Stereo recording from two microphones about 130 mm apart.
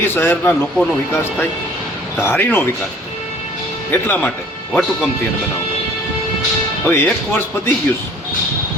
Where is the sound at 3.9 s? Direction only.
15° left (ahead or behind).